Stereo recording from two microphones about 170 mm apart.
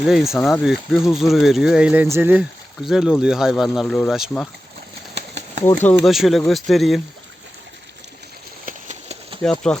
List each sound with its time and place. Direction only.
0.0 s speech: centre (ahead or behind)
5.6 s speech: 10° left (ahead or behind)
6.0 s speech: centre (ahead or behind)
8.6 s a sound: 45° right (ahead or behind)
9.4 s speech: 5° left (ahead or behind)